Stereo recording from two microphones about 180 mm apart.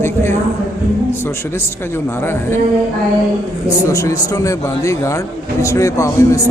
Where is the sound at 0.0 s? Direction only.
15° left (ahead or behind).